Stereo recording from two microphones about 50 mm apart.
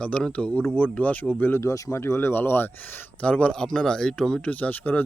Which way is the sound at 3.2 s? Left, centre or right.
Left.